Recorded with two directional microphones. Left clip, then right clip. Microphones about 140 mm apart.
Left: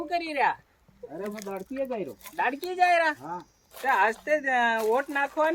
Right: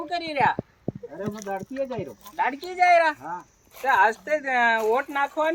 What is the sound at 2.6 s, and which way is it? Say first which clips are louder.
Speech: right 4 dB; 15° left (ahead or behind).